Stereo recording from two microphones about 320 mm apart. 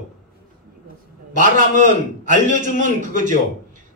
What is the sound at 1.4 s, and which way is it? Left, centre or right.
A man's voice, right.